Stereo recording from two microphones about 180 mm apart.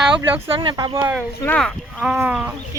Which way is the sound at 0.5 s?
25° right (ahead or behind).